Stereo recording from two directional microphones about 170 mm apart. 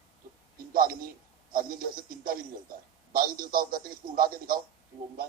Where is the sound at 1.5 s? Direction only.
55° right (ahead or behind).